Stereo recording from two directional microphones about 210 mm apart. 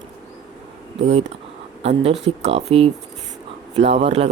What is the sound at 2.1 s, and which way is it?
Speech, 55° right (ahead or behind).